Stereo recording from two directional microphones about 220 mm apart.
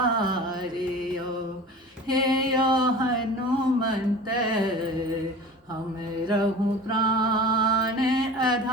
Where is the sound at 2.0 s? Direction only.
20° right (ahead or behind).